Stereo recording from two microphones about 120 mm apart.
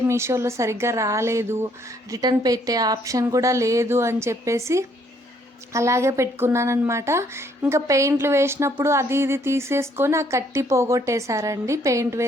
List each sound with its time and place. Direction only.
0.1 s speech: 20° right (ahead or behind)